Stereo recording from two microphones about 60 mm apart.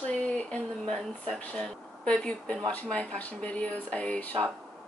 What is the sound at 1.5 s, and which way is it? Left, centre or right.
Speech, centre.